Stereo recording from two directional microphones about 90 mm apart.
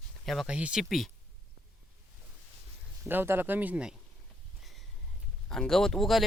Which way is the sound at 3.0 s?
25° right (ahead or behind).